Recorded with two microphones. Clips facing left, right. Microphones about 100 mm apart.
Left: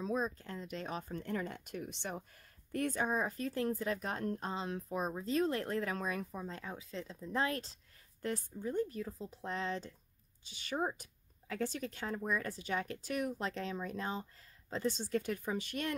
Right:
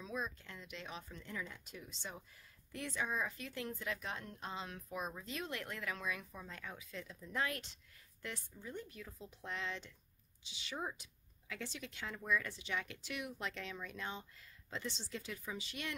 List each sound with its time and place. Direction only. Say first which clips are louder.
0.0 s speech: left 7 dB; 40° left (ahead or behind)
10.4 s speech: left 7 dB; 50° left (ahead or behind)